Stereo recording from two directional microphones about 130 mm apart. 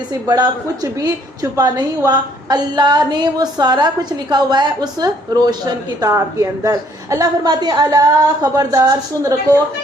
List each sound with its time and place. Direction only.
0.3 s a woman's voice: 30° right (ahead or behind)